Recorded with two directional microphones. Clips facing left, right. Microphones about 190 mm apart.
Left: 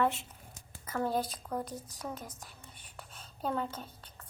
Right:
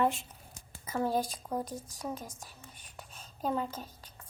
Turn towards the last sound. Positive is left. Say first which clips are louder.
# right 1 dB
turn(degrees=-10)  # may be behind; listen again after turning